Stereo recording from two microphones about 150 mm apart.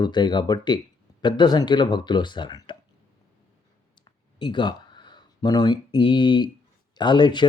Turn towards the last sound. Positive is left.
turn(degrees=30)  # may be behind; listen again after turning